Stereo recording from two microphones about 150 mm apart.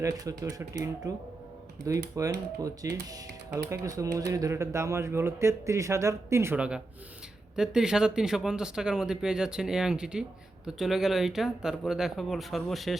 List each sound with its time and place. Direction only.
0.0 s speech: 25° right (ahead or behind); by 13.0 s centre (ahead or behind)